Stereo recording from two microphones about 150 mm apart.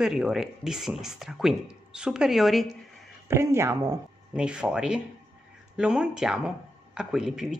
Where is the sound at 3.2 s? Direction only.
15° right (ahead or behind).